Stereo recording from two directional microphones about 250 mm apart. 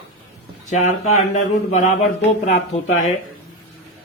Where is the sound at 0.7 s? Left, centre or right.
Left.